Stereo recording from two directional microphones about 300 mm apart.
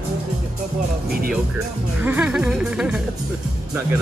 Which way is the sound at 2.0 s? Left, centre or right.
Centre.